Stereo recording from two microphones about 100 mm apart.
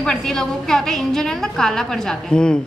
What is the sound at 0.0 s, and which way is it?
A woman's voice, 5° left (ahead or behind).